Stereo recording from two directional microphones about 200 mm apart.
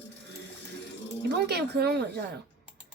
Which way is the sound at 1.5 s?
55° right (ahead or behind).